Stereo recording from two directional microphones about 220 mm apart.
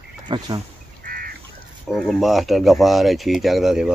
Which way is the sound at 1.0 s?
40° right (ahead or behind).